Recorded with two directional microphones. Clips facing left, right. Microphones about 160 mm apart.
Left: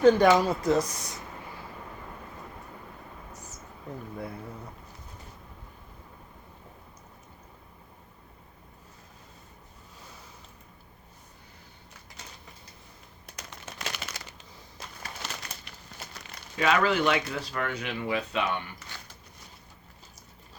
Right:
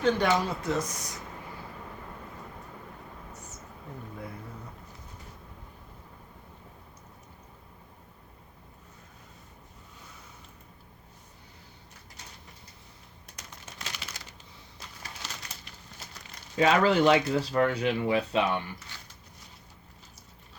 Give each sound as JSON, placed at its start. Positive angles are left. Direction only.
{"t": 0.0, "sound": "speech", "side_deg": 40}
{"t": 13.2, "sound": "a sound", "side_deg": 80}
{"t": 16.0, "sound": "crumpling", "side_deg": 55}
{"t": 16.6, "sound": "speech", "side_deg": -30}